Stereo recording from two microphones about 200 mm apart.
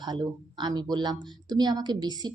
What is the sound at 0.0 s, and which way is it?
Speech, 20° right (ahead or behind).